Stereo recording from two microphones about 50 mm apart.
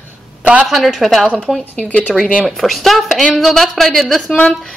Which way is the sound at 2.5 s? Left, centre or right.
Centre.